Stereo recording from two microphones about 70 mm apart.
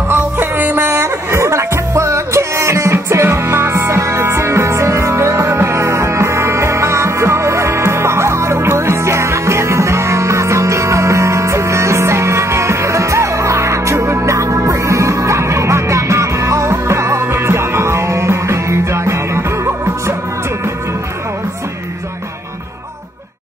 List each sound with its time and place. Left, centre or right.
0.1 s music: right